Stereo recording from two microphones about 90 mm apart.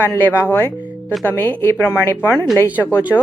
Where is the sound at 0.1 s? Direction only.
25° left (ahead or behind).